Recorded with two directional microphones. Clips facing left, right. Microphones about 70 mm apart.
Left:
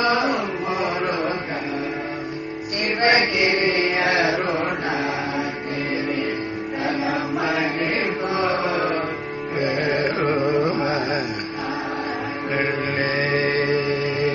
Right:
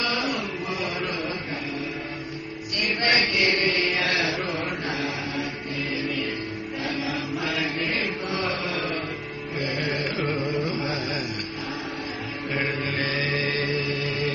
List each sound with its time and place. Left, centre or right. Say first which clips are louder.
0.0 s a sound: left 7 dB; left
3.0 s chant: left 5 dB; left
6.9 s chant: left 6 dB; left
9.6 s music: left 7 dB; left
10.5 s carnatic music: left 7 dB; left
12.5 s music: left 4 dB; left